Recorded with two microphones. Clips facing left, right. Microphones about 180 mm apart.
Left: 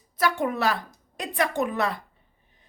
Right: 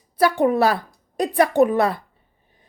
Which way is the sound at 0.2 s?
35° right (ahead or behind).